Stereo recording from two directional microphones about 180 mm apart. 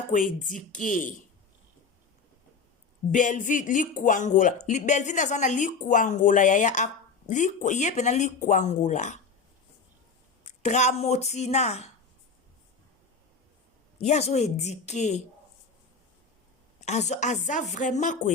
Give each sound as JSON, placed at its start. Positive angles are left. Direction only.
{"t": 0.1, "sound": "speech", "side_deg": 45}
{"t": 3.1, "sound": "speech", "side_deg": 45}
{"t": 10.4, "sound": "speech", "side_deg": 40}
{"t": 14.0, "sound": "speech", "side_deg": 35}
{"t": 16.8, "sound": "speech", "side_deg": 40}